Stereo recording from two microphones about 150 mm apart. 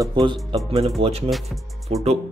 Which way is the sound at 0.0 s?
30° right (ahead or behind).